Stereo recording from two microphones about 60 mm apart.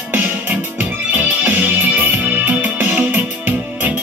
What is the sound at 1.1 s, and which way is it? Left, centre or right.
Music, right.